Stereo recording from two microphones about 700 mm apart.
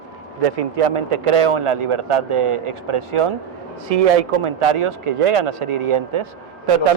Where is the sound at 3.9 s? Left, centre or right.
Right.